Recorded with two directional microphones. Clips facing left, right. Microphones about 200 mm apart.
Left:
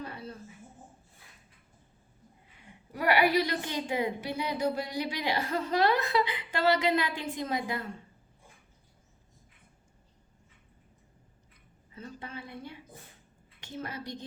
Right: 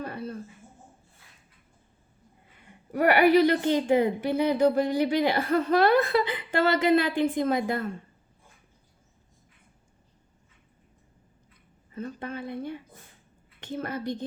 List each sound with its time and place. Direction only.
0.0 s a sound: 55° right (ahead or behind)
2.9 s a woman's voice: 55° right (ahead or behind)
11.9 s a woman's voice: 55° right (ahead or behind)